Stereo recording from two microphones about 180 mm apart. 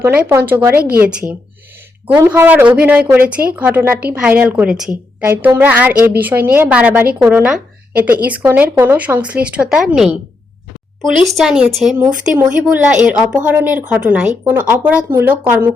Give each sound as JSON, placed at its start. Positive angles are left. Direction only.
{"t": 0.0, "sound": "speech", "side_deg": -10}
{"t": 2.1, "sound": "speech", "side_deg": -15}
{"t": 8.5, "sound": "speech", "side_deg": -10}